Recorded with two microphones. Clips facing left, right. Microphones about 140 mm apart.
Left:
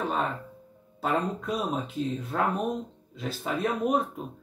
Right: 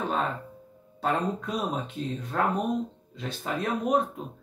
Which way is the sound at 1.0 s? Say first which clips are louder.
Even; centre (ahead or behind).